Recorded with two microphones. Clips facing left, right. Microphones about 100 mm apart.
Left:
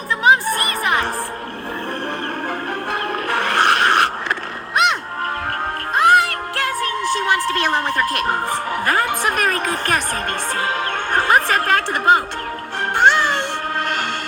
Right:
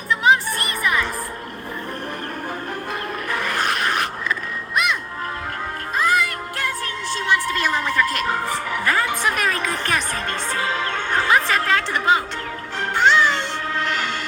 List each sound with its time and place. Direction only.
0.3 s music: 50° left (ahead or behind)
3.2 s a sound: 65° left (ahead or behind)
5.9 s music: 70° left (ahead or behind)
7.2 s music: 60° left (ahead or behind)
8.7 s a sound: 45° left (ahead or behind)
10.6 s music: 45° left (ahead or behind)